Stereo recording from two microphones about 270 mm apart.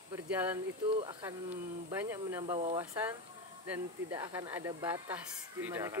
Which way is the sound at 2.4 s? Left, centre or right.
Right.